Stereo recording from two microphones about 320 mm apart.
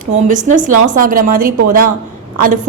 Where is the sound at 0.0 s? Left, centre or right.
Right.